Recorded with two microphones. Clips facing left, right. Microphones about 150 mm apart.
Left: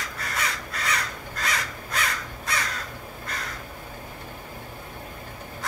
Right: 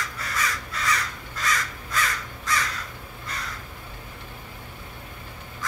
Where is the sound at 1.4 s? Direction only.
65° left (ahead or behind).